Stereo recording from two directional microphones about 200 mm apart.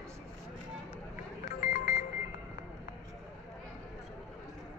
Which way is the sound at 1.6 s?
40° left (ahead or behind).